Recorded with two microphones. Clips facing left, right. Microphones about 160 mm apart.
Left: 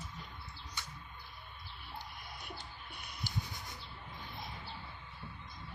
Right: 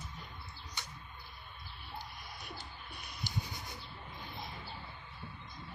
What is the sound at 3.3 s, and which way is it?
Rub, 15° right (ahead or behind).